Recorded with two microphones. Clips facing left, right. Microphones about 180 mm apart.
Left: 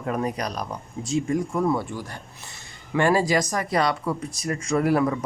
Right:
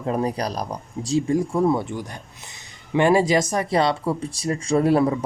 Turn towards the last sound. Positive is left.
turn(degrees=-25)  # may be behind; listen again after turning